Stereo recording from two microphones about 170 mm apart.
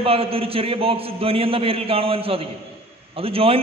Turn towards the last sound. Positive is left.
turn(degrees=-35)  # may be behind; listen again after turning